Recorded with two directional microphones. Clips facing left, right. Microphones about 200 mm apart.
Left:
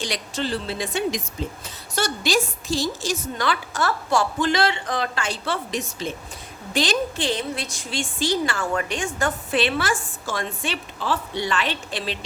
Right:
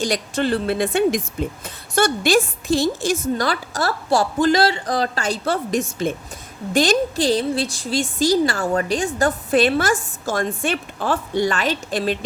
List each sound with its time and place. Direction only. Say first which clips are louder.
0.0 s a woman's voice: right 6 dB; 50° right (ahead or behind)
3.3 s a woman's voice: right 3 dB; 40° right (ahead or behind)